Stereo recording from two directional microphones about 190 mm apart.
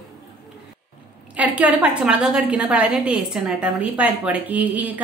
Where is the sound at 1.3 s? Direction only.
5° right (ahead or behind).